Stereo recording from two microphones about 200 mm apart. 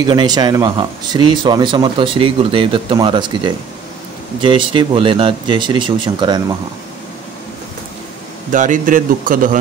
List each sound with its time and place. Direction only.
0.0 s speech: 20° right (ahead or behind)
8.5 s speech: 40° right (ahead or behind)